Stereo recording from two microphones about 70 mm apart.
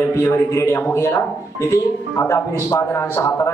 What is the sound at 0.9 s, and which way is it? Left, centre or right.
Speech, left.